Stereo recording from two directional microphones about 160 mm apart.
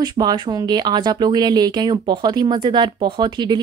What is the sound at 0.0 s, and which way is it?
Speech, 25° right (ahead or behind).